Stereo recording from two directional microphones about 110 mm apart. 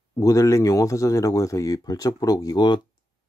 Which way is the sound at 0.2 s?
30° left (ahead or behind).